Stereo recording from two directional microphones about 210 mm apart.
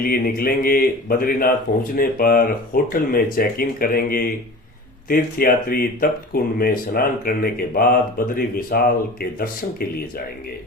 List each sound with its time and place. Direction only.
0.0 s speech: 45° left (ahead or behind)